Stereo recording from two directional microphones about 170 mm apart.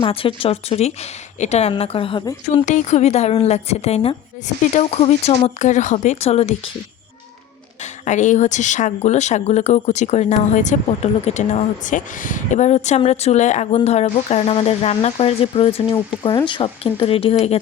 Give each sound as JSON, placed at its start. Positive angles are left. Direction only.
{"t": 0.0, "sound": "speech", "side_deg": 30}
{"t": 2.6, "sound": "speech", "side_deg": 45}
{"t": 8.0, "sound": "speech", "side_deg": 45}